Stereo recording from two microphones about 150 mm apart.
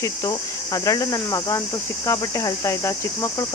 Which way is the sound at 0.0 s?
20° left (ahead or behind).